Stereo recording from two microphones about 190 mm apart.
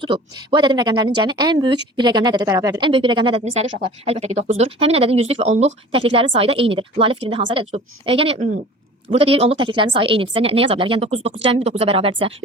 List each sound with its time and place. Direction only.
0.0 s speech: 25° right (ahead or behind)